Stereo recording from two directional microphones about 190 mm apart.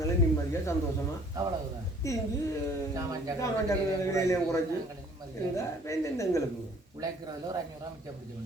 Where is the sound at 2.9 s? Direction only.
20° right (ahead or behind).